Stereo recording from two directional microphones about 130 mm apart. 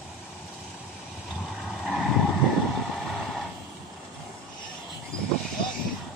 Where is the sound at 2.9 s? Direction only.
Centre (ahead or behind).